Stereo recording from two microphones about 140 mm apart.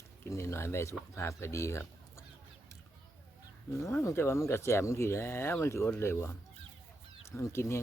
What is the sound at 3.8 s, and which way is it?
Speech, 20° left (ahead or behind).